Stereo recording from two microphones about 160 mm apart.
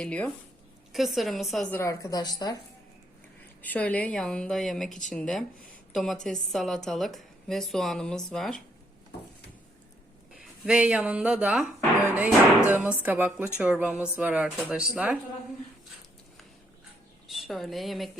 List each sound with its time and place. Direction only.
0.0 s a woman's voice: 10° left (ahead or behind)
1.7 s a woman's voice: 15° left (ahead or behind)
3.6 s a woman's voice: 10° left (ahead or behind)
10.7 s speech: 5° right (ahead or behind)
17.2 s a woman's voice: centre (ahead or behind)